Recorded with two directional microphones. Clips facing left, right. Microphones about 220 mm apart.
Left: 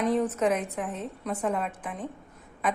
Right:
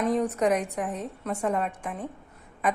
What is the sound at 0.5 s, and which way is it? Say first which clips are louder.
A woman's voice: right 2 dB; 15° right (ahead or behind).